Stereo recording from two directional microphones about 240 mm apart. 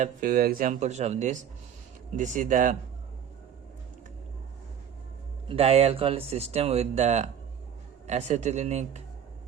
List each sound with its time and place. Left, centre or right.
0.0 s speech: right
5.5 s speech: right